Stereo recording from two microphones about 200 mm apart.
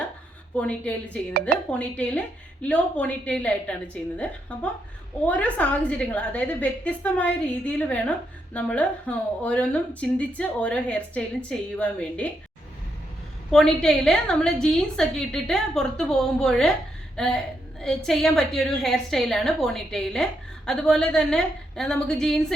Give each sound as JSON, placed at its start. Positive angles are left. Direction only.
{"t": 0.5, "sound": "speech", "side_deg": 5}
{"t": 1.3, "sound": "speech", "side_deg": -50}
{"t": 1.8, "sound": "a woman's voice", "side_deg": 5}
{"t": 13.5, "sound": "a woman's voice", "side_deg": 0}